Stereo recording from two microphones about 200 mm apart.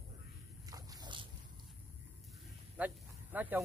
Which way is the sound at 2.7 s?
10° right (ahead or behind).